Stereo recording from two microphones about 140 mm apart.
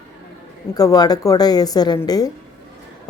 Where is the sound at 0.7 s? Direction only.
25° left (ahead or behind).